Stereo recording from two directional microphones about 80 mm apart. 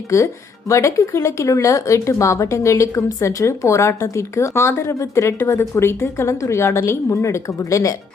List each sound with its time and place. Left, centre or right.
0.1 s speech: left